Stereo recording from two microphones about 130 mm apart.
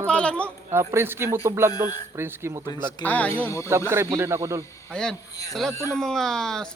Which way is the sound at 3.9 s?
20° right (ahead or behind).